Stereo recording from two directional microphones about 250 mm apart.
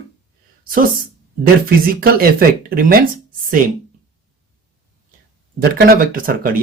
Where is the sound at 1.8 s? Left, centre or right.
Right.